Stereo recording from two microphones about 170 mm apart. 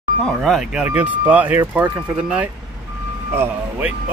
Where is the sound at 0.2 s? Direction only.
Centre (ahead or behind).